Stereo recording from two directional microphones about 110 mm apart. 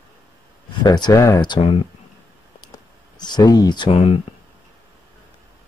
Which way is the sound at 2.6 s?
40° left (ahead or behind).